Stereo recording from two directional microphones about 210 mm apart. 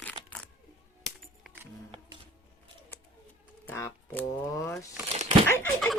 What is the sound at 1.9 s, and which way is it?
Music, 25° right (ahead or behind).